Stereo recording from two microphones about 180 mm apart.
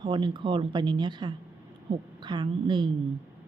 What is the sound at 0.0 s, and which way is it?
Speech, 25° right (ahead or behind).